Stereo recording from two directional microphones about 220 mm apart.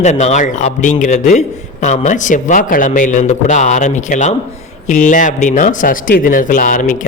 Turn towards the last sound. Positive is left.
turn(degrees=35)  # may be behind; listen again after turning